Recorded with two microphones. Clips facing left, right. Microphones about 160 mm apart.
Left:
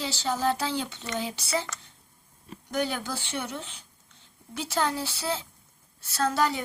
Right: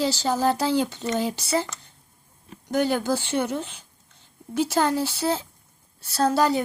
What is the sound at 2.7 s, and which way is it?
Speech, 45° right (ahead or behind).